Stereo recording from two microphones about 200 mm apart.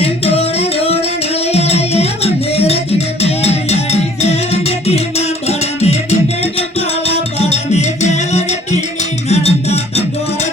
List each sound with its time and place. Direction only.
0.0 s music: 30° left (ahead or behind)